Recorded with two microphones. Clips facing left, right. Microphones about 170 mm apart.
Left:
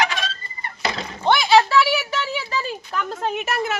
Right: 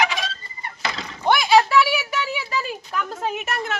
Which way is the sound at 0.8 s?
25° left (ahead or behind).